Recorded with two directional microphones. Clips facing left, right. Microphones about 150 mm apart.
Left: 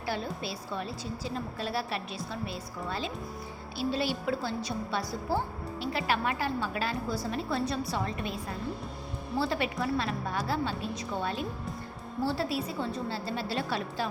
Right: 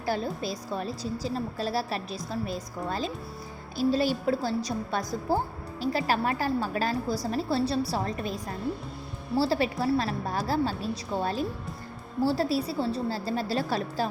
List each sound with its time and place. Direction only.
0.0 s a woman's voice: 40° right (ahead or behind)